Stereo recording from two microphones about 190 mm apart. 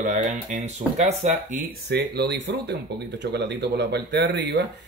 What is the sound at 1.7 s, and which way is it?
Speech, 60° right (ahead or behind).